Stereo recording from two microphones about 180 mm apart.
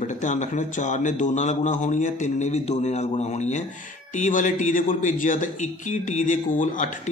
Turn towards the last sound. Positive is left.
turn(degrees=45)  # may be behind; listen again after turning